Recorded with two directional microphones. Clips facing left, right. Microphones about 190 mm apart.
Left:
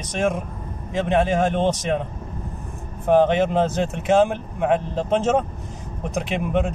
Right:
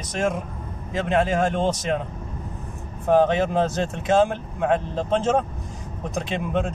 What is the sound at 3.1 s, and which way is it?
Speech, 20° left (ahead or behind).